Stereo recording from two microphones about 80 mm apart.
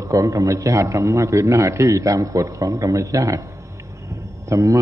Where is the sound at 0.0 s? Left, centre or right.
Right.